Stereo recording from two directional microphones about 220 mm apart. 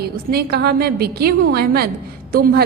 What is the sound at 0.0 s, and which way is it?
A woman's voice, 45° right (ahead or behind).